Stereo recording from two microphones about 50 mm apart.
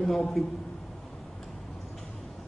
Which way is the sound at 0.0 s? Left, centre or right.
Centre.